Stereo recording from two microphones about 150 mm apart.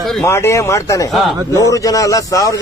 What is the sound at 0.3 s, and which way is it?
A man's voice, 20° left (ahead or behind).